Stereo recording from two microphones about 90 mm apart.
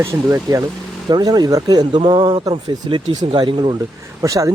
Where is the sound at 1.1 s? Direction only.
50° right (ahead or behind).